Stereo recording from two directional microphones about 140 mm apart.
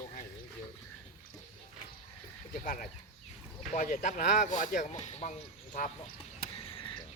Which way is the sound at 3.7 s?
65° left (ahead or behind).